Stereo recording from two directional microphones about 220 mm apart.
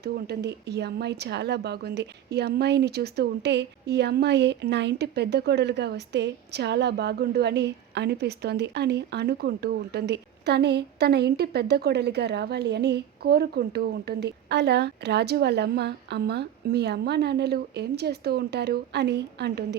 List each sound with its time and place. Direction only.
0.0 s speech: 45° right (ahead or behind)